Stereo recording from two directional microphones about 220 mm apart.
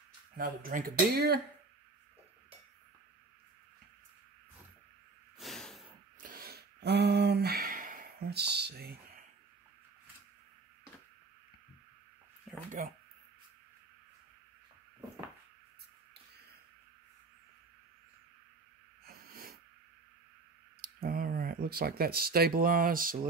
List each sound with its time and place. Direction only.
0.4 s speech: 40° right (ahead or behind)
5.4 s snort: centre (ahead or behind)
6.2 s a sound: 40° right (ahead or behind)
12.8 s speech: 35° right (ahead or behind)
19.0 s snort: 40° right (ahead or behind)
20.8 s speech: 40° right (ahead or behind)